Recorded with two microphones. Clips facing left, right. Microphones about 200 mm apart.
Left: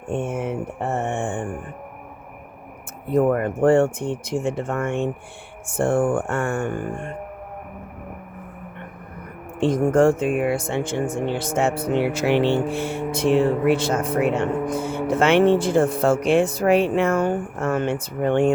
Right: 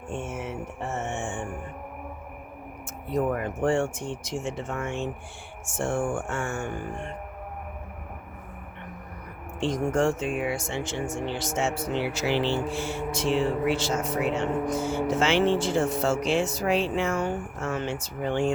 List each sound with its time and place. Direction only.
0.1 s mantra: 55° left (ahead or behind)
3.1 s speech: 55° left (ahead or behind)
9.6 s speech: 55° left (ahead or behind)